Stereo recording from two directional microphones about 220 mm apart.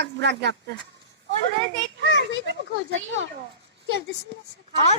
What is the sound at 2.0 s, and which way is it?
A child's voice, 50° right (ahead or behind).